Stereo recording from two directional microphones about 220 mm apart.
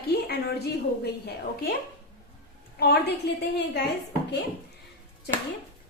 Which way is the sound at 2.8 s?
45° left (ahead or behind).